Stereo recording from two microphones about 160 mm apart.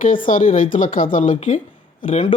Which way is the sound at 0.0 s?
60° left (ahead or behind).